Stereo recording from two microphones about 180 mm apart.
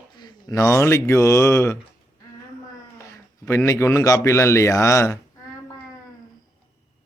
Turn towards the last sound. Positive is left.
turn(degrees=15)  # may be behind; listen again after turning